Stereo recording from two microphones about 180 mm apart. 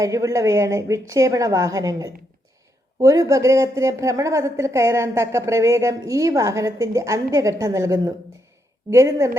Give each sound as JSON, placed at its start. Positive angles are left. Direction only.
{"t": 0.0, "sound": "a woman's voice", "side_deg": -15}